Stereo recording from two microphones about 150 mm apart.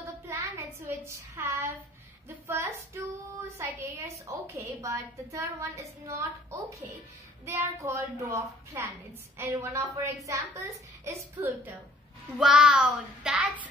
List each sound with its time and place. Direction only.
0.3 s child singing: 15° right (ahead or behind)
2.2 s a woman's voice: 15° right (ahead or behind)
12.4 s child singing: 5° right (ahead or behind)